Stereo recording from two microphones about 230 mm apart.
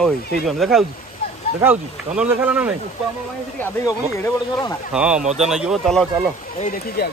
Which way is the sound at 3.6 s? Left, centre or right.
Centre.